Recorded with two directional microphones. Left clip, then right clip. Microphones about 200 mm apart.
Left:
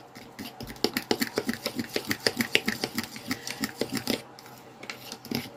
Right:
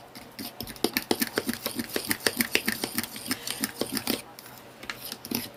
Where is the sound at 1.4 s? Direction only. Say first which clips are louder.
Even; 5° right (ahead or behind).